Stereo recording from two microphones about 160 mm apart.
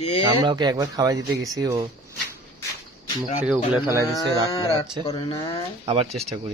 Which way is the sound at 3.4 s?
5° right (ahead or behind).